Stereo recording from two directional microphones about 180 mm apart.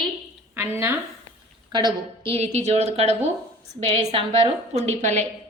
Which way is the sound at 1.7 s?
25° right (ahead or behind).